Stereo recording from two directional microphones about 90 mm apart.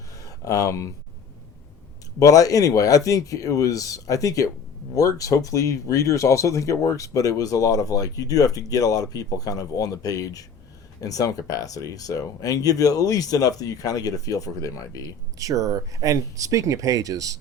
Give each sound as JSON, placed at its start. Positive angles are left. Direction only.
{"t": 0.2, "sound": "speech", "side_deg": 40}
{"t": 2.1, "sound": "speech", "side_deg": 40}
{"t": 15.4, "sound": "speech", "side_deg": -40}